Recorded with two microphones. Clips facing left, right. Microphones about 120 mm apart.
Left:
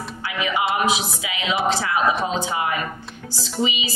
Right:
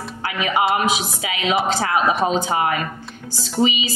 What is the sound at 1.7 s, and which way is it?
Music, 50° right (ahead or behind).